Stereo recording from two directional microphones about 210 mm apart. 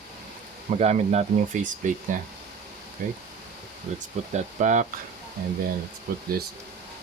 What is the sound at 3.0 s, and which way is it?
Speech, 40° right (ahead or behind).